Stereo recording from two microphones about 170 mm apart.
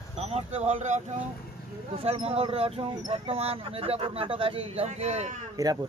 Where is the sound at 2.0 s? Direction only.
35° right (ahead or behind).